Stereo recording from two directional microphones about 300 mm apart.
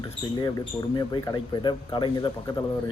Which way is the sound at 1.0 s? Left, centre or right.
Centre.